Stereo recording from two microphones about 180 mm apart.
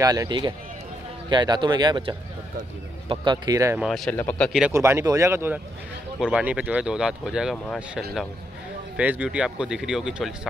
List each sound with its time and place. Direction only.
0.0 s speech: 20° right (ahead or behind)
3.8 s speech: centre (ahead or behind)
4.5 s speech: 5° right (ahead or behind)
4.7 s speech: 15° right (ahead or behind)
7.5 s speech: 5° left (ahead or behind)
8.9 s speech: 10° right (ahead or behind)